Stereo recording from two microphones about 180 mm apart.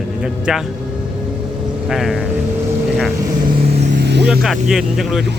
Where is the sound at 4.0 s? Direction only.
70° right (ahead or behind).